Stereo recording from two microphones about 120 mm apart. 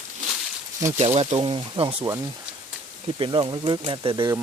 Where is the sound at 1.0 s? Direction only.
70° right (ahead or behind).